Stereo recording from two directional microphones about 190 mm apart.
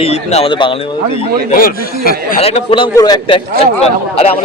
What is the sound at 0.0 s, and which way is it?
Speech, 35° left (ahead or behind).